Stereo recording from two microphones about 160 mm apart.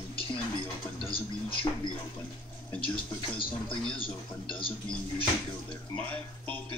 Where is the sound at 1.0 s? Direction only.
35° left (ahead or behind).